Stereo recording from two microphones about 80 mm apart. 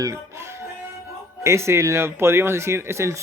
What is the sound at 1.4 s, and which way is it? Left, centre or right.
Speech, right.